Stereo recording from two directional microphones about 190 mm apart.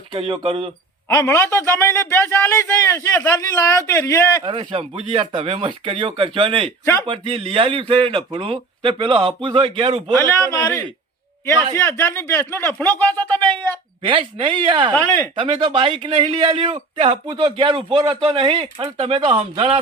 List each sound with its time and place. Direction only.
0.1 s a man's voice: 30° right (ahead or behind)
1.0 s a man's voice: 15° left (ahead or behind)
4.4 s a man's voice: 25° right (ahead or behind)
10.6 s a man's voice: 10° left (ahead or behind)
14.0 s a man's voice: 25° right (ahead or behind)
14.9 s a man's voice: 10° left (ahead or behind)
15.4 s a man's voice: 25° right (ahead or behind)
16.7 s speech: 35° right (ahead or behind)
17.2 s a man's voice: 25° right (ahead or behind)